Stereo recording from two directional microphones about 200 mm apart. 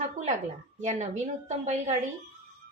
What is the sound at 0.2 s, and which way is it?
Speech, 35° right (ahead or behind).